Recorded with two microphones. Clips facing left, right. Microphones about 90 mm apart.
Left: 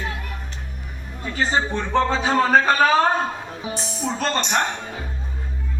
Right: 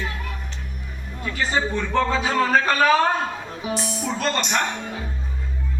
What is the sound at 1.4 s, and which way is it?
A man's voice, 30° left (ahead or behind).